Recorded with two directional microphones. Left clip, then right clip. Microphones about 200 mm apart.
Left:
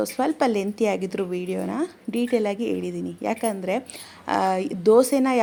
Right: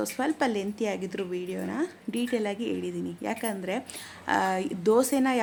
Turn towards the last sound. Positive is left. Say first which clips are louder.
# left 6 dB
turn(degrees=10)  # may be behind; listen again after turning